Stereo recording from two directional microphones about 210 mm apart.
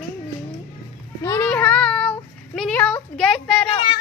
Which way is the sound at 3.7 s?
20° left (ahead or behind).